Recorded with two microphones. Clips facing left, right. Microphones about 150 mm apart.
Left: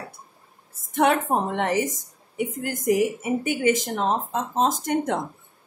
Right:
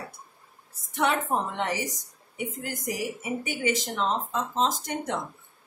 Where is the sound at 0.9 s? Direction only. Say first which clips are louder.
Left 5 dB; 50° left (ahead or behind).